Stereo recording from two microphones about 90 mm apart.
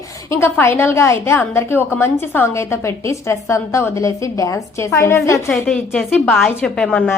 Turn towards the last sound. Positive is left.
turn(degrees=10)  # may be behind; listen again after turning